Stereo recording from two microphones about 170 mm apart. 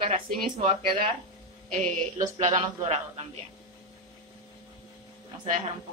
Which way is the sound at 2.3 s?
40° right (ahead or behind).